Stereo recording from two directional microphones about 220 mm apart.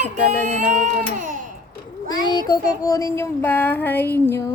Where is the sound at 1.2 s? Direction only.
35° right (ahead or behind).